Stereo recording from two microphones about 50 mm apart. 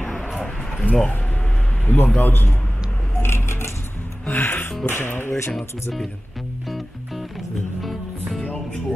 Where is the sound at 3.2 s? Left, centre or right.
Left.